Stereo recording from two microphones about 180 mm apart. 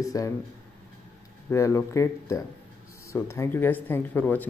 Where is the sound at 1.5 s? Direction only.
15° left (ahead or behind).